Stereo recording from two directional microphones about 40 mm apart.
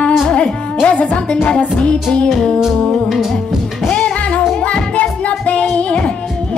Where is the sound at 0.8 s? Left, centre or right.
Left.